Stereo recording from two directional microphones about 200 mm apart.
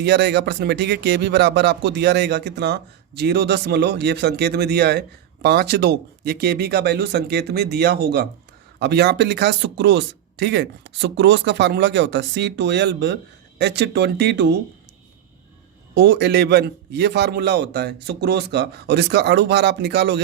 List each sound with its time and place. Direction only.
0.0 s a man's voice: 55° right (ahead or behind)
16.0 s a man's voice: 60° right (ahead or behind)